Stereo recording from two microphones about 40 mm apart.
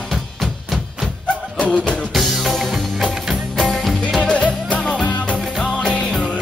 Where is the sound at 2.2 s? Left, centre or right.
Centre.